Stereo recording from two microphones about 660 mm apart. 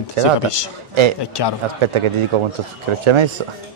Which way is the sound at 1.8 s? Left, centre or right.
Right.